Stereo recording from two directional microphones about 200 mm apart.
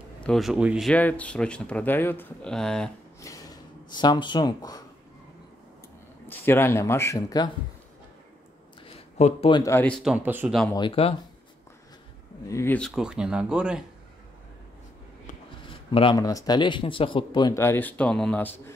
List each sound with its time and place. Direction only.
0.2 s speech: centre (ahead or behind)
3.2 s speech: 15° left (ahead or behind)
6.2 s speech: 10° left (ahead or behind)
8.8 s a sound: 30° left (ahead or behind)
9.6 s speech: 10° left (ahead or behind)
10.1 s speech: 10° right (ahead or behind)
10.7 s speech: 25° left (ahead or behind)
12.4 s speech: 10° left (ahead or behind); by 13.8 s 5° right (ahead or behind)
15.9 s speech: 25° left (ahead or behind); by 18.6 s 10° left (ahead or behind)